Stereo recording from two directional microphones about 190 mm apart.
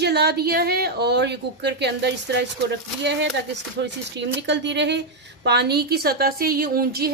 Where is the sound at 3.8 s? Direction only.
65° right (ahead or behind).